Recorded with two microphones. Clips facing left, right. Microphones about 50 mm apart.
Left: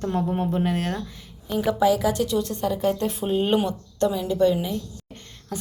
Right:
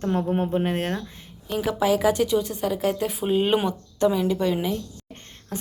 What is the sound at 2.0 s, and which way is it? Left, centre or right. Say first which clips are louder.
Speech: right 2 dB; right.